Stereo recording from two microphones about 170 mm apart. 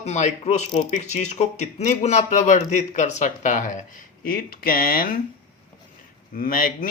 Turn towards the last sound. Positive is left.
turn(degrees=55)  # may be behind; listen again after turning